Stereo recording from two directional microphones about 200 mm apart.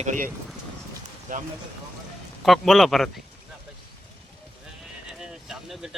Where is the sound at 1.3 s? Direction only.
40° right (ahead or behind).